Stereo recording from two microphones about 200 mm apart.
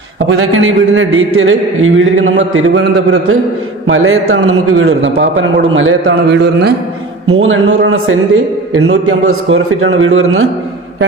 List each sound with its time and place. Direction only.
0.3 s a man's voice: 90° right
5.1 s a man's voice: 60° right (ahead or behind); by 6.1 s 80° right
6.2 s a man's voice: 55° right (ahead or behind)
7.3 s speech: 85° right
8.7 s a man's voice: 90° right